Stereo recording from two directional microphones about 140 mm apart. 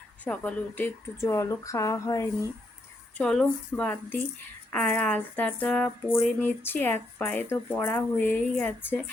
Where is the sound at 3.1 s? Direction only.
5° left (ahead or behind).